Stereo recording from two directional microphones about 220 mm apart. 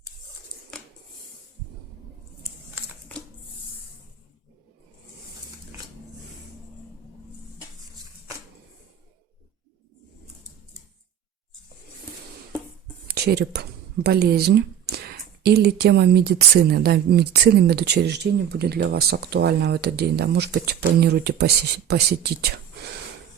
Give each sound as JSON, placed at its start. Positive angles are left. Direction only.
{"t": 13.1, "sound": "speech", "side_deg": -45}